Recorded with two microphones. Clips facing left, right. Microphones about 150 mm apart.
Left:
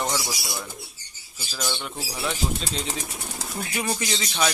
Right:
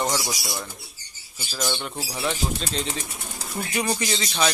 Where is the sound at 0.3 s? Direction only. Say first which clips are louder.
Right 1 dB; centre (ahead or behind).